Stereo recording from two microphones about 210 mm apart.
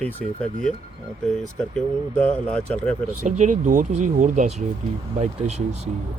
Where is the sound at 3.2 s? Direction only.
35° right (ahead or behind).